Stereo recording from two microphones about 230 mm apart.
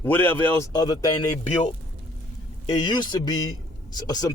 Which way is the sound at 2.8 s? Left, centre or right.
Centre.